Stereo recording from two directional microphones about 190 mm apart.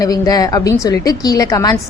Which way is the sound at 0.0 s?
20° left (ahead or behind).